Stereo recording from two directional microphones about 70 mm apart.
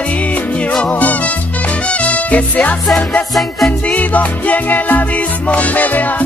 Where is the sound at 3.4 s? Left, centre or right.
Centre.